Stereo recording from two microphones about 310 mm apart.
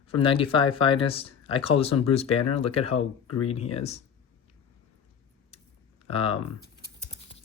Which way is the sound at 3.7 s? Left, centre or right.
Centre.